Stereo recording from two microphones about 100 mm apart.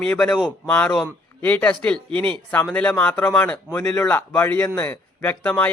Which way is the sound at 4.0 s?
25° left (ahead or behind).